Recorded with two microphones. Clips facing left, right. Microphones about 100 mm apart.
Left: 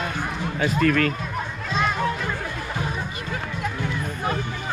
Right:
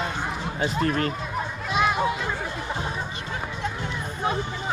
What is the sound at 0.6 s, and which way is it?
Speech, 25° right (ahead or behind).